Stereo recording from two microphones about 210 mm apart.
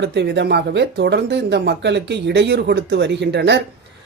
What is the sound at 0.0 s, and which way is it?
Speech, 55° right (ahead or behind).